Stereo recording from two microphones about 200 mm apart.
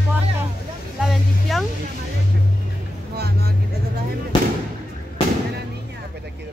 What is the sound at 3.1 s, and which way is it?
Speech, 50° right (ahead or behind).